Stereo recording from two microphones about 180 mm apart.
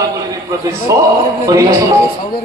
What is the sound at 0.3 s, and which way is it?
A man's voice, 20° right (ahead or behind).